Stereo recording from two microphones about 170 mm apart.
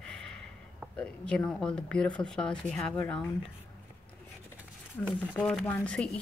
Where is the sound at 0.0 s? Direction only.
5° left (ahead or behind).